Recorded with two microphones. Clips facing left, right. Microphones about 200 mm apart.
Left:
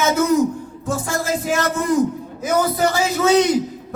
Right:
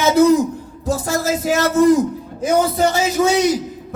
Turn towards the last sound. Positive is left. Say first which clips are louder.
# even
turn(degrees=-15)  # may be behind; listen again after turning